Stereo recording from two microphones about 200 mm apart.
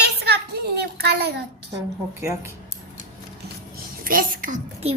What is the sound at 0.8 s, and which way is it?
Speech, 55° right (ahead or behind).